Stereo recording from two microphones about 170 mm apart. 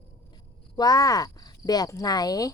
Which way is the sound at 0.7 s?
20° left (ahead or behind).